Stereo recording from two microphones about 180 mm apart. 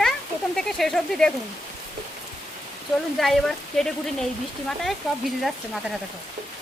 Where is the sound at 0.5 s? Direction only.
5° left (ahead or behind).